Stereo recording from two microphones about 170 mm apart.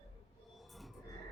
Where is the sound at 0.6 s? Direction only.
Centre (ahead or behind).